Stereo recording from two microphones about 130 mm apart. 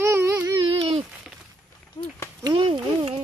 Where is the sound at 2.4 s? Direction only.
30° right (ahead or behind).